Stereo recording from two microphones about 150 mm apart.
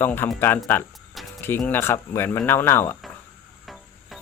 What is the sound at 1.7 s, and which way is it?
Speech, 15° left (ahead or behind).